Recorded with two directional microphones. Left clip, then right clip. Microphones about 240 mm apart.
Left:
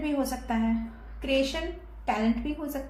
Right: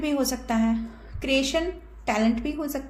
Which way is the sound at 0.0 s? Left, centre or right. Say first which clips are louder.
Right 4 dB; right.